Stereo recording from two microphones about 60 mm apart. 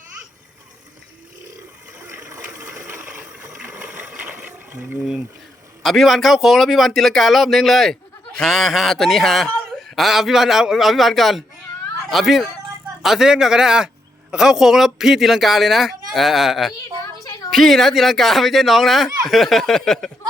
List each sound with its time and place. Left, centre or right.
2.0 s water: right
2.8 s sewing machine: right
3.6 s a sound: right
4.4 s ratchet: right
5.8 s a man's voice: centre
17.0 s a sound: left
17.5 s a man's voice: centre